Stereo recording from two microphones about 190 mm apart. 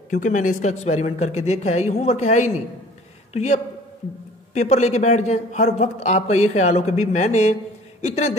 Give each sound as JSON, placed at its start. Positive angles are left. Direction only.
{"t": 0.1, "sound": "a man's voice", "side_deg": 40}